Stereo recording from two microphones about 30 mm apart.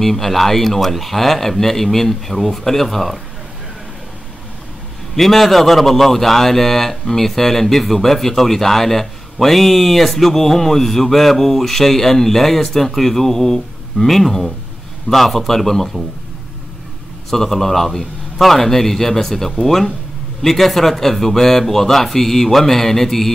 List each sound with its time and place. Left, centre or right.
0.0 s speech: centre
5.1 s a man's voice: centre
17.3 s a man's voice: centre